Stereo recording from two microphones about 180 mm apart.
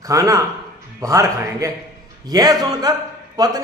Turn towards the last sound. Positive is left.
turn(degrees=-20)  # may be behind; listen again after turning